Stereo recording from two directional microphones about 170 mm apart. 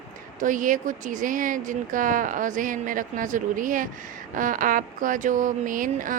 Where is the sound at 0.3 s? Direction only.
50° right (ahead or behind).